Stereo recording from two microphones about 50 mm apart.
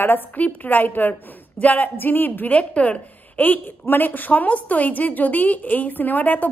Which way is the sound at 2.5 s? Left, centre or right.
Left.